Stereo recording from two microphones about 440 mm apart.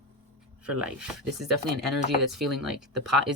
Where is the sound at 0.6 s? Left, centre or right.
Centre.